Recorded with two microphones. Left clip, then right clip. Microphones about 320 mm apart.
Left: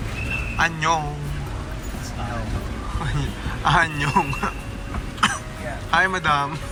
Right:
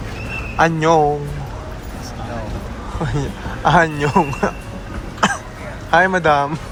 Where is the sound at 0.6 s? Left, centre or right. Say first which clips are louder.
Right 7 dB; right.